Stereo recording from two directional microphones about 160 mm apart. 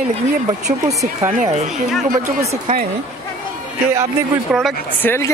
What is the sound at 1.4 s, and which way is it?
Speech, 40° right (ahead or behind).